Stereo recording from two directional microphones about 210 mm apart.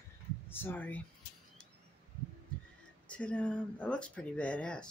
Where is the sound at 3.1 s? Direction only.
5° left (ahead or behind).